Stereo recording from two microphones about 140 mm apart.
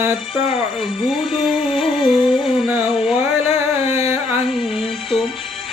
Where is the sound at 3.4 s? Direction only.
50° left (ahead or behind).